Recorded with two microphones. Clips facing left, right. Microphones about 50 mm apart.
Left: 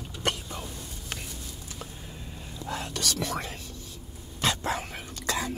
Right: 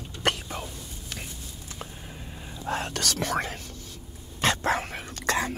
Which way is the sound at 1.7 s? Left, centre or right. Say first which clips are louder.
Right 1 dB; right.